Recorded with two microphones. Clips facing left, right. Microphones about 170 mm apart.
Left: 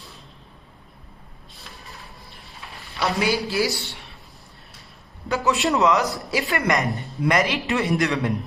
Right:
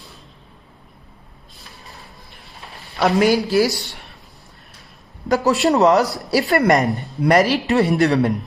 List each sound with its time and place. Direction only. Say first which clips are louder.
3.2 s a woman's voice: right 7 dB; 40° right (ahead or behind)
5.3 s a woman's voice: right 5 dB; 40° right (ahead or behind)